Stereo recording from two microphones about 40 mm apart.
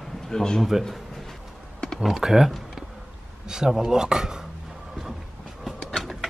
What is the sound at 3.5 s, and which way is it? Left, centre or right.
Speech, centre.